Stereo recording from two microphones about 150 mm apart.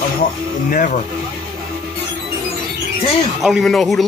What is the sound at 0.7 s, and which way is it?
Speech, 60° left (ahead or behind).